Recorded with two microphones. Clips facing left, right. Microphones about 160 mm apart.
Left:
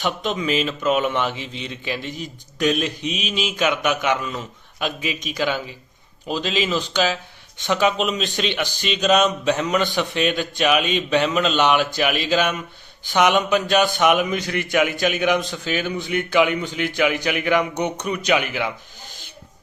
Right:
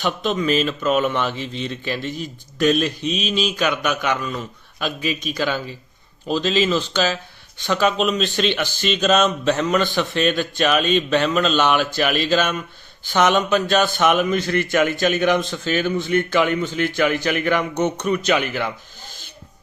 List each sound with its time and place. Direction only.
0.0 s speech: 20° left (ahead or behind)